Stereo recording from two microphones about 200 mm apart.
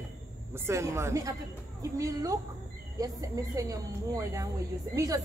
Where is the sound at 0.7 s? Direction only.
15° right (ahead or behind).